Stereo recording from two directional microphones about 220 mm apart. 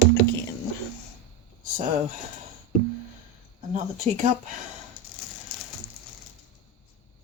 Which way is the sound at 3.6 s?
30° right (ahead or behind).